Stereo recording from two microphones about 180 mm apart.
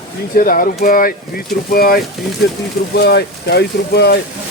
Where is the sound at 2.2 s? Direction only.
Centre (ahead or behind).